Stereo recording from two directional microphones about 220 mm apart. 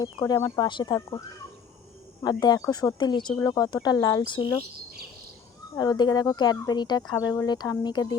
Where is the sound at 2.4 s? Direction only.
20° left (ahead or behind).